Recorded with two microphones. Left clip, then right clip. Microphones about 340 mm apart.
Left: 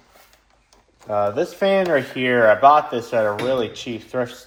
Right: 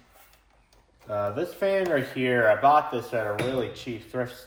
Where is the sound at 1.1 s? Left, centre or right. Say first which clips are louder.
Left 8 dB; centre.